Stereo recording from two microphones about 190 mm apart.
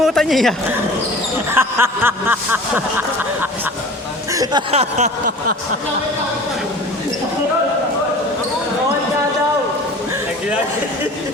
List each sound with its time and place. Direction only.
0.0 s speech: centre (ahead or behind)
1.5 s chuckle: 10° right (ahead or behind)
4.3 s speech: 20° right (ahead or behind)
4.7 s a sound: 35° right (ahead or behind)